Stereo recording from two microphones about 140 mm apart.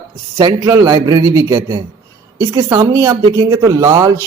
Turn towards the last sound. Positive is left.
turn(degrees=-25)  # may be behind; listen again after turning